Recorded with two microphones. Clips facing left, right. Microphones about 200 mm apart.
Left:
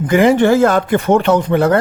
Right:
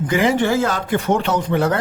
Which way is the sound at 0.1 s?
55° left (ahead or behind).